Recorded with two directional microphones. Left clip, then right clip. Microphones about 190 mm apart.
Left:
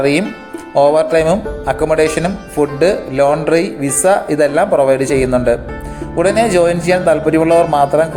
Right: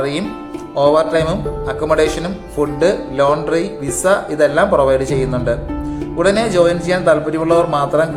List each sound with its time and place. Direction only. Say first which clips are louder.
0.8 s speech: left 2 dB; 25° left (ahead or behind)